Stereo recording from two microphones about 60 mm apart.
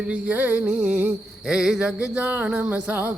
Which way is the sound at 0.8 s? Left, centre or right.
Right.